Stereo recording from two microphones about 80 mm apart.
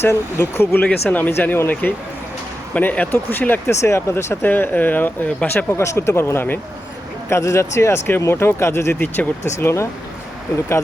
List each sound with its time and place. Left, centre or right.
0.0 s speech: left
3.8 s speech: left
5.7 s speech: left